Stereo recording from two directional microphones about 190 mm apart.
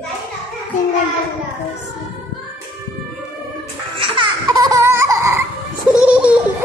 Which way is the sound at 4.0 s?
25° right (ahead or behind).